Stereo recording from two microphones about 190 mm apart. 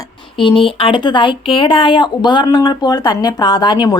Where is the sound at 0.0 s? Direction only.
25° left (ahead or behind).